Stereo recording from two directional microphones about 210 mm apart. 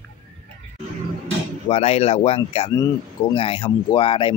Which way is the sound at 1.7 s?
30° left (ahead or behind).